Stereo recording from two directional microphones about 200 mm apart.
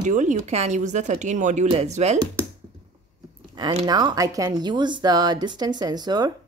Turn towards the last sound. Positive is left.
turn(degrees=-20)  # may be behind; listen again after turning